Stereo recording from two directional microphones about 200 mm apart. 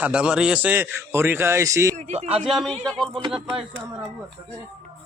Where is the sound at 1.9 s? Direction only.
35° right (ahead or behind).